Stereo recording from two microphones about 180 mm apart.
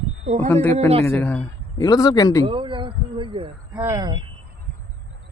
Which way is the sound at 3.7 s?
15° right (ahead or behind).